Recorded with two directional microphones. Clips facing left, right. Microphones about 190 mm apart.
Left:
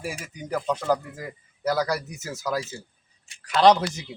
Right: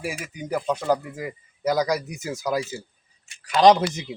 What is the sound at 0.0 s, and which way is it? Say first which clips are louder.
Speech: right 3 dB; 10° right (ahead or behind).